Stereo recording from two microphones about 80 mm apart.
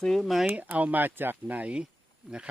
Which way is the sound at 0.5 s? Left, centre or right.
Centre.